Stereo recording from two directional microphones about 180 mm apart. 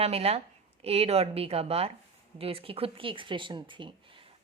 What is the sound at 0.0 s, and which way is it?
A woman's voice, 35° right (ahead or behind).